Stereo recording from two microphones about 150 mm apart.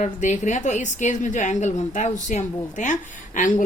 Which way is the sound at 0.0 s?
55° left (ahead or behind).